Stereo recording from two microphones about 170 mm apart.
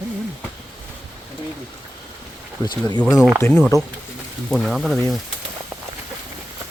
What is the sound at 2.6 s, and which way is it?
Speech, 25° left (ahead or behind).